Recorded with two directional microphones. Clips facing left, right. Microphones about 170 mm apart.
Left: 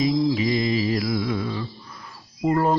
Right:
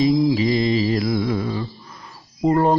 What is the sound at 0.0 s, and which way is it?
Mantra, 30° right (ahead or behind).